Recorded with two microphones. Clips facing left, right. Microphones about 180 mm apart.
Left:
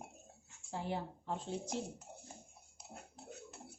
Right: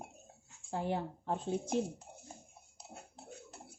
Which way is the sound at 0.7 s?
50° right (ahead or behind).